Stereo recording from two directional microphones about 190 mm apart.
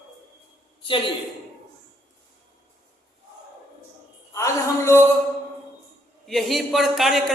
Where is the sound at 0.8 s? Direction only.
25° left (ahead or behind).